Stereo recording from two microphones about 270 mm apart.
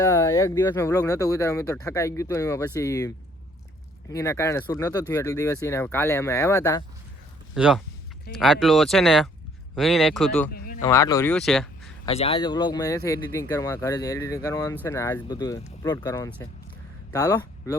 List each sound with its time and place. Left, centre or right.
0.0 s speech: centre
4.1 s speech: centre
7.5 s speech: centre
10.5 s a sound: left
10.8 s speech: centre
12.0 s speech: left